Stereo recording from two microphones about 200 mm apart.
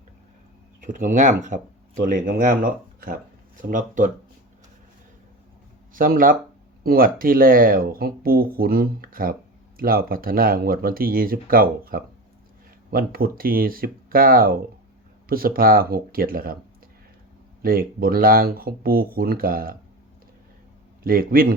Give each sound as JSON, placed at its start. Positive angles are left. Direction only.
{"t": 0.8, "sound": "speech", "side_deg": -40}
{"t": 5.9, "sound": "speech", "side_deg": -45}
{"t": 17.6, "sound": "speech", "side_deg": -45}
{"t": 21.0, "sound": "speech", "side_deg": -45}